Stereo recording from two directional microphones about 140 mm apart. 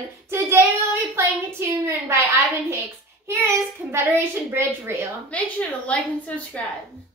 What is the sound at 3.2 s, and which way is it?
A child's voice, 15° right (ahead or behind).